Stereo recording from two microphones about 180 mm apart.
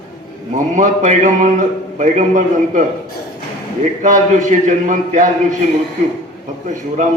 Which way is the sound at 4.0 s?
45° right (ahead or behind).